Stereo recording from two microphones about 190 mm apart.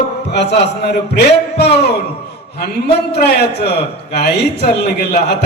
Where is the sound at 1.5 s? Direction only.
60° left (ahead or behind).